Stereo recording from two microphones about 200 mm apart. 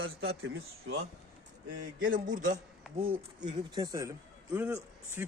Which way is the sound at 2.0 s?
40° right (ahead or behind).